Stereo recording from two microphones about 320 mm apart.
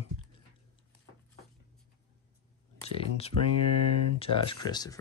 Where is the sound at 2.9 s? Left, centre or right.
Centre.